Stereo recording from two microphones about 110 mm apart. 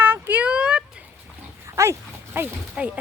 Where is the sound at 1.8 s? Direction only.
25° right (ahead or behind).